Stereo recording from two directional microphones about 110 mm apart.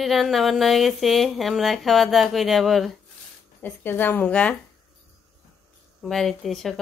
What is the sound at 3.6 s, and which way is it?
Speech, 20° left (ahead or behind).